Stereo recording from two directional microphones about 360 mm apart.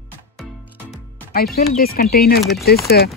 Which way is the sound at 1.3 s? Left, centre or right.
Left.